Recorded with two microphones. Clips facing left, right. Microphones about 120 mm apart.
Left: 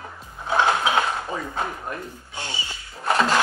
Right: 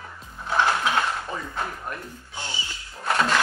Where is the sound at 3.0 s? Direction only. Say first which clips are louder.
Left 2 dB; 25° left (ahead or behind).